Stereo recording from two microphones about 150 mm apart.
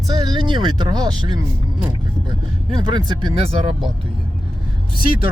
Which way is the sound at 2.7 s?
30° right (ahead or behind).